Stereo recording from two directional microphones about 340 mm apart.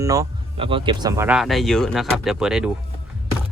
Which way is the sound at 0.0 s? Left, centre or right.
Centre.